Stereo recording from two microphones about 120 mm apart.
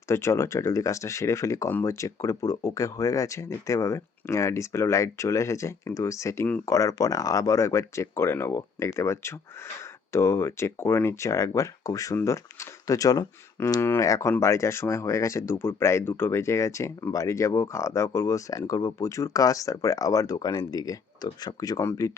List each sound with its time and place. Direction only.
0.1 s speech: 25° left (ahead or behind)